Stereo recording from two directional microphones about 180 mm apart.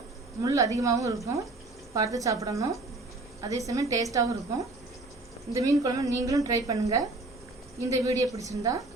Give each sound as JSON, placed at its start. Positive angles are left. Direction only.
{"t": 0.4, "sound": "speech", "side_deg": -20}
{"t": 3.7, "sound": "a woman's voice", "side_deg": -20}